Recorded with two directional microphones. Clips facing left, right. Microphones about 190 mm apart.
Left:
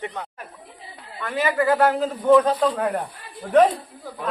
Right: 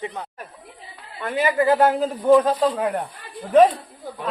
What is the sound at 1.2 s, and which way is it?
Speech, 30° right (ahead or behind).